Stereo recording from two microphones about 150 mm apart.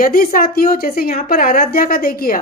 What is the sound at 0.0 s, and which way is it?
A woman's voice, 70° left (ahead or behind).